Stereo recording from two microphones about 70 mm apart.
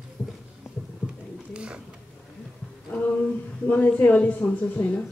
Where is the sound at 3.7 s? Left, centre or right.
Left.